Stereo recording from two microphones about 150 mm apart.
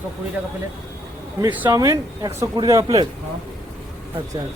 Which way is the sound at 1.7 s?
25° right (ahead or behind).